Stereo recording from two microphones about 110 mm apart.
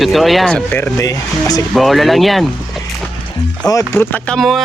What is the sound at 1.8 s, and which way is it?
Speech, centre (ahead or behind).